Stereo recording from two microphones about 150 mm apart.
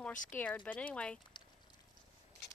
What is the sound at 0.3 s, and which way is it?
Speech, 10° left (ahead or behind).